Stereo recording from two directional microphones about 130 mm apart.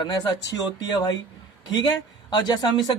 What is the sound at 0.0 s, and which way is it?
Speech, 30° left (ahead or behind).